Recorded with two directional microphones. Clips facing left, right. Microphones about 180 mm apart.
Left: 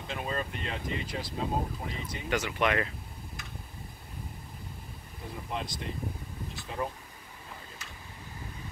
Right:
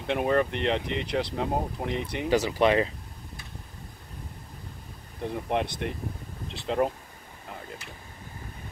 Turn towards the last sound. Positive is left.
turn(degrees=-70)  # may be behind; listen again after turning